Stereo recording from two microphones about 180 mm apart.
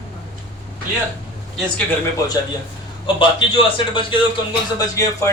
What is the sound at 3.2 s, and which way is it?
Speech, 30° left (ahead or behind).